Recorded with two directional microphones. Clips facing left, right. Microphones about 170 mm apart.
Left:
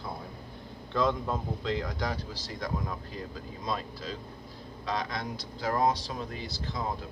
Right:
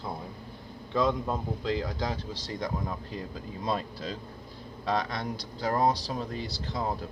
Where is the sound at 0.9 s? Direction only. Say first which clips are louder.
Right 1 dB; 10° right (ahead or behind).